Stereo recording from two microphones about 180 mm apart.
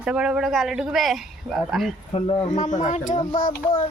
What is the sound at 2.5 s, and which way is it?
Speech, 40° left (ahead or behind).